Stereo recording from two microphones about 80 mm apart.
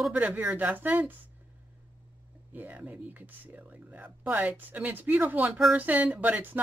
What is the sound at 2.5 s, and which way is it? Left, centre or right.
Speech, right.